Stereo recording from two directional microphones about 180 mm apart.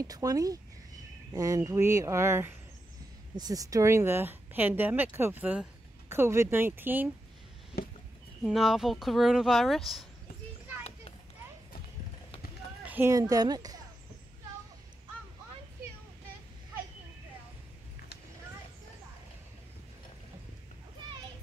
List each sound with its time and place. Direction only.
0.0 s speech: 20° right (ahead or behind)
7.7 s a sound: 55° left (ahead or behind)
8.5 s speech: centre (ahead or behind)
12.8 s speech: 10° right (ahead or behind)